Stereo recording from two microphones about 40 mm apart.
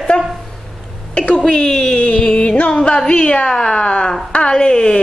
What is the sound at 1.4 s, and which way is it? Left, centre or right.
Music, left.